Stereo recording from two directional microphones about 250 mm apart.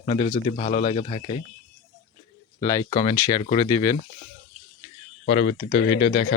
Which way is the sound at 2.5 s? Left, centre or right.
Centre.